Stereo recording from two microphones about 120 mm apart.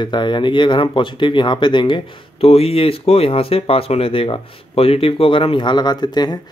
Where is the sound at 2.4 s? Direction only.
55° left (ahead or behind); by 6.4 s 35° left (ahead or behind).